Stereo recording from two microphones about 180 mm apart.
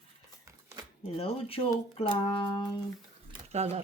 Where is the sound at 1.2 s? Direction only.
35° left (ahead or behind).